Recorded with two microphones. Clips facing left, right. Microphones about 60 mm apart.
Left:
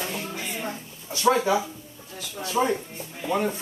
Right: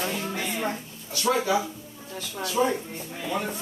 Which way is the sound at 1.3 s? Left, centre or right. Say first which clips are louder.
Left 3 dB; left.